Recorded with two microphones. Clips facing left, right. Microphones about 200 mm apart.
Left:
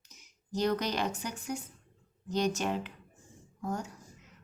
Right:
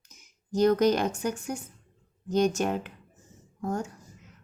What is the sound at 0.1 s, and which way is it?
A woman's voice, 45° right (ahead or behind).